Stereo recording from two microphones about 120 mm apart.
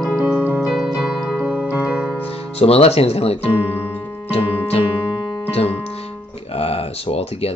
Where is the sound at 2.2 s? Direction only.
55° left (ahead or behind).